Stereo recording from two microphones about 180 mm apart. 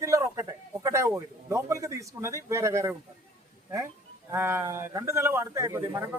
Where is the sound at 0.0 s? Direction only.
15° right (ahead or behind).